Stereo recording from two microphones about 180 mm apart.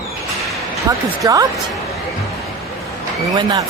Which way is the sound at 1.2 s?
20° right (ahead or behind).